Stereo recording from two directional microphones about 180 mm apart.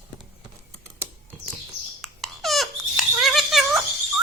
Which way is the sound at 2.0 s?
Centre (ahead or behind).